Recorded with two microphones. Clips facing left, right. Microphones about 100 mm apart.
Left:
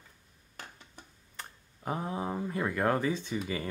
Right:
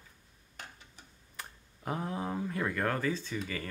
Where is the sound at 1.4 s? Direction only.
5° left (ahead or behind).